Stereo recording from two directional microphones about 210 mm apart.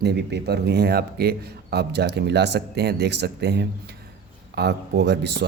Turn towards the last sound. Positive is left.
turn(degrees=-55)  # may be behind; listen again after turning